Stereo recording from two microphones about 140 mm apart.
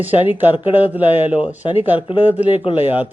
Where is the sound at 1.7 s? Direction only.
40° left (ahead or behind).